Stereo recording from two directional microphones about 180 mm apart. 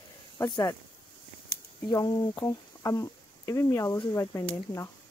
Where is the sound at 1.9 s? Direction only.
20° left (ahead or behind).